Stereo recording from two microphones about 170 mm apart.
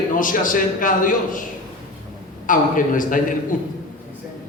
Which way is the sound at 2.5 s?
50° left (ahead or behind).